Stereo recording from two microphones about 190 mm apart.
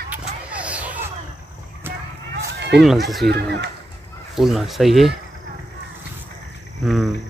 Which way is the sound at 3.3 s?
60° right (ahead or behind).